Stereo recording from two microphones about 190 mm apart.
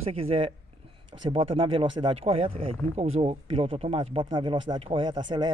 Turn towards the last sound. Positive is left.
turn(degrees=-25)  # may be behind; listen again after turning